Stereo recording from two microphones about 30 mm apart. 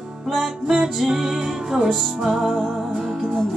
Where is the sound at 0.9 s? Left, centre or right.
Centre.